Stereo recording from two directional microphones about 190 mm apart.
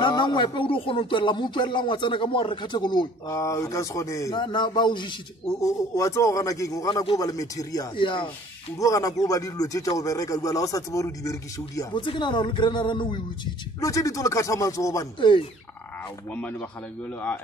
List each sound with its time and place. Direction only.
0.0 s speech: 25° left (ahead or behind)